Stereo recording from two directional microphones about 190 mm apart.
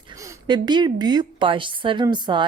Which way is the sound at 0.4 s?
20° right (ahead or behind).